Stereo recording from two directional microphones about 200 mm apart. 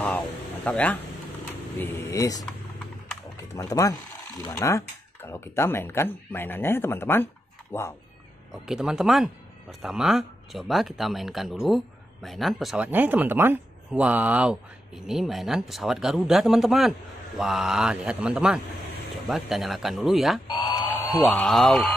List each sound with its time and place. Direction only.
0.7 s speech: 5° left (ahead or behind)
3.5 s speech: 15° left (ahead or behind)
8.6 s speech: 5° right (ahead or behind)
20.4 s a sound: 20° left (ahead or behind)
21.2 s speech: centre (ahead or behind)